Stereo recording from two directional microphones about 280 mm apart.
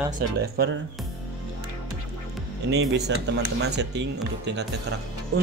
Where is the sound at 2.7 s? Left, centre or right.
Right.